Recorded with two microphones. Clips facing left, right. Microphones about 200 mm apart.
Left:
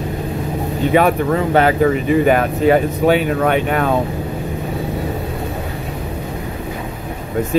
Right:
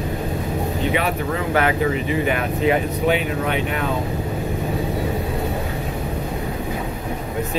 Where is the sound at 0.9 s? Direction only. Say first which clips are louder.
Left 8 dB; 45° left (ahead or behind).